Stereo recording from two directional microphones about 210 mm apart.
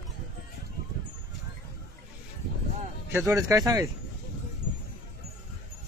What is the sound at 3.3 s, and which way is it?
Speech, 15° right (ahead or behind).